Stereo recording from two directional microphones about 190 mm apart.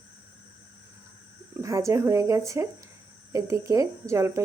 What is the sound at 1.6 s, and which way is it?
Speech, 15° right (ahead or behind).